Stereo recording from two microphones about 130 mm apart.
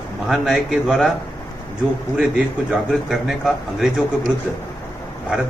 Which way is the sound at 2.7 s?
5° right (ahead or behind).